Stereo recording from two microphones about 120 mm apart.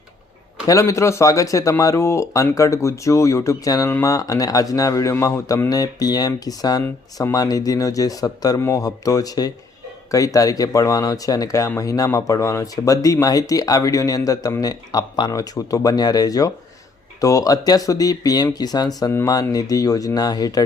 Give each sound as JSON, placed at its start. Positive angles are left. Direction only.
{"t": 0.7, "sound": "speech", "side_deg": 25}